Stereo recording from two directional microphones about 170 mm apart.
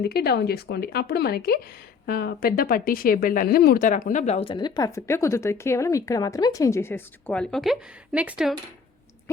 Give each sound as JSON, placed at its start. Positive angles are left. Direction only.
{"t": 0.0, "sound": "speech", "side_deg": 70}